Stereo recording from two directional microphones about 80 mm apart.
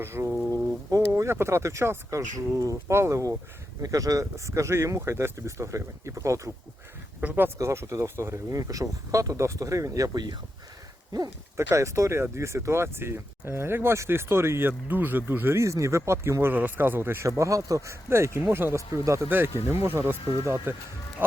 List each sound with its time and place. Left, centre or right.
0.0 s speech: right
7.2 s speech: right
7.6 s speech: right
11.5 s speech: right
17.2 s speech: right